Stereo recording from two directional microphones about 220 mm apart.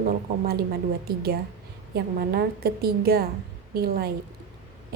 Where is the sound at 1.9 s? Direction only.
45° right (ahead or behind).